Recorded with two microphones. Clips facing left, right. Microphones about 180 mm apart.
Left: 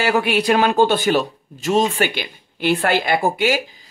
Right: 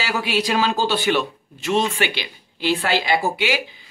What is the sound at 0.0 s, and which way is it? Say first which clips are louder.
Speech: left 5 dB; 55° left (ahead or behind).